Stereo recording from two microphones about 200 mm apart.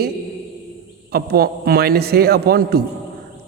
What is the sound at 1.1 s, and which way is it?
Speech, 50° right (ahead or behind).